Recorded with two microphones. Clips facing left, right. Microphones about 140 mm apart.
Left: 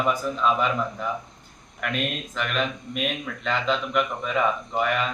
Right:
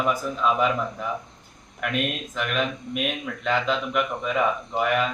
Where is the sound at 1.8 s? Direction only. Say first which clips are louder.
Right 1 dB; 5° right (ahead or behind).